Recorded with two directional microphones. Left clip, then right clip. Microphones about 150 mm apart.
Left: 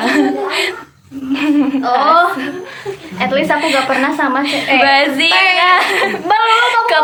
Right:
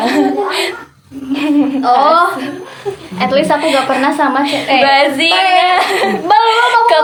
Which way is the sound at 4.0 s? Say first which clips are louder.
Right 2 dB; 10° right (ahead or behind).